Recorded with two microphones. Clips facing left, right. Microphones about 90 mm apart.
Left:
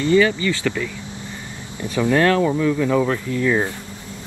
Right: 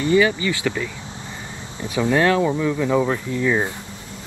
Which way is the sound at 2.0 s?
10° right (ahead or behind).